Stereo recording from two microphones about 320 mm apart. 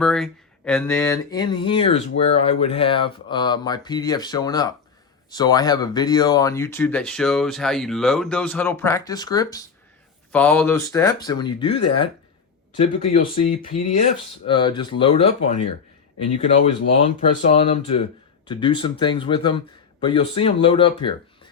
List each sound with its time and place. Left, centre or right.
0.0 s speech: centre
17.2 s speech: left